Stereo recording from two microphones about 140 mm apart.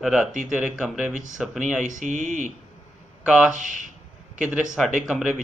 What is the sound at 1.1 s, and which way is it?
Speech, 65° right (ahead or behind).